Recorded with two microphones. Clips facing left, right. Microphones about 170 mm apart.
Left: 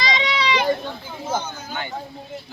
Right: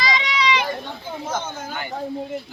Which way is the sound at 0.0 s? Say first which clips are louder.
Even; 25° left (ahead or behind).